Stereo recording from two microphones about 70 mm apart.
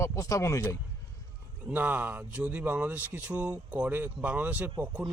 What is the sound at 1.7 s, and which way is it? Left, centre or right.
A man's voice, right.